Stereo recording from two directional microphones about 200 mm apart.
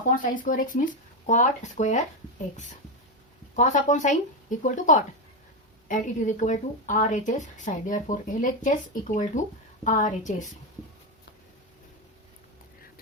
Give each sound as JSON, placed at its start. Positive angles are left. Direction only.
{"t": 0.3, "sound": "speech", "side_deg": 40}
{"t": 3.5, "sound": "speech", "side_deg": 40}